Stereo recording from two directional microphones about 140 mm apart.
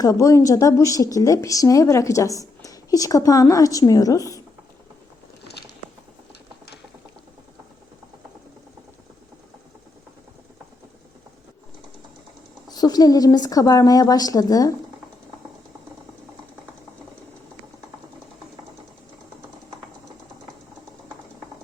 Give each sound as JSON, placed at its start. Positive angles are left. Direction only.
{"t": 0.0, "sound": "speech", "side_deg": 25}
{"t": 12.6, "sound": "speech", "side_deg": 30}